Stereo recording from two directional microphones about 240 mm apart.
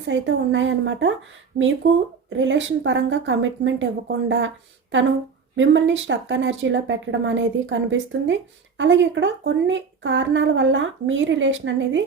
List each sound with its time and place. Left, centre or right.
0.1 s speech: right
2.3 s speech: right